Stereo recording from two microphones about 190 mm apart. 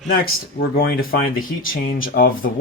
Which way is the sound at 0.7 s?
50° left (ahead or behind).